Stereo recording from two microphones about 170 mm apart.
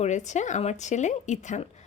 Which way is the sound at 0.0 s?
45° left (ahead or behind).